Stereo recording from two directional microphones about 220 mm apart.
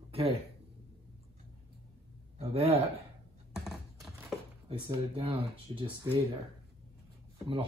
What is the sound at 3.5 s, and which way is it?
Computer keyboard, centre (ahead or behind).